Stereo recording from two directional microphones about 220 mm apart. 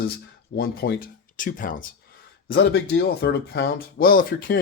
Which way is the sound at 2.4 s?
50° left (ahead or behind).